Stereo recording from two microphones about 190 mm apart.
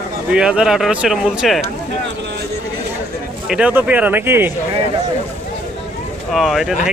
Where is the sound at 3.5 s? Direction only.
5° right (ahead or behind).